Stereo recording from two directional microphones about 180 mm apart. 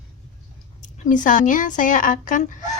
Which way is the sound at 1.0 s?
45° left (ahead or behind).